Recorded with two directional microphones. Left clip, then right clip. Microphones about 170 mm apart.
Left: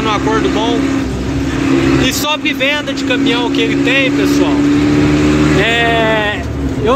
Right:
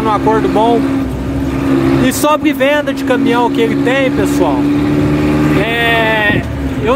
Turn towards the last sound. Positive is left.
turn(degrees=-5)  # may be behind; listen again after turning